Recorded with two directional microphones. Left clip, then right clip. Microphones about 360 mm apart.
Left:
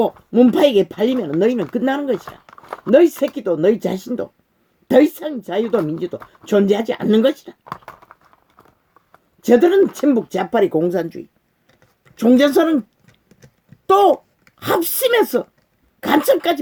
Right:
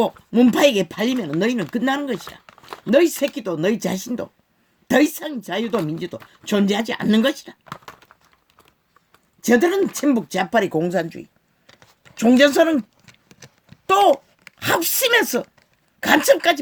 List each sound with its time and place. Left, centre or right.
0.0 s speech: centre
9.4 s speech: centre
13.2 s a sound: right
14.6 s speech: right